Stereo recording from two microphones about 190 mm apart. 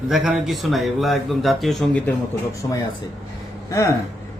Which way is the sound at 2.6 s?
20° left (ahead or behind).